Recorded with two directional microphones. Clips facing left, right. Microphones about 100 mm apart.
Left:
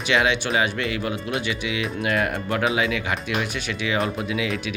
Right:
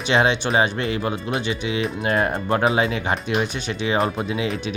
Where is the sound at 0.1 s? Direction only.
30° right (ahead or behind).